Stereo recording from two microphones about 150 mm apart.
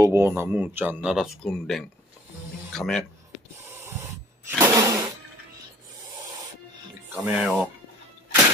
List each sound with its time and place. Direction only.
0.0 s speech: 15° right (ahead or behind); by 3.1 s 5° left (ahead or behind)
3.8 s snake: 15° right (ahead or behind)
7.1 s speech: 10° right (ahead or behind)